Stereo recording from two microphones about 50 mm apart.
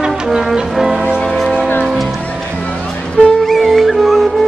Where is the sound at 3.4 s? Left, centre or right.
Centre.